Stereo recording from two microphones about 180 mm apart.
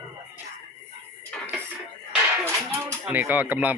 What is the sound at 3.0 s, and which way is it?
Speech, 10° right (ahead or behind).